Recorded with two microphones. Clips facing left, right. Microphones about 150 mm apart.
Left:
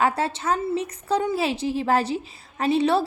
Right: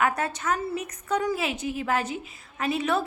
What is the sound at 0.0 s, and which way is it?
A woman's voice, 30° left (ahead or behind).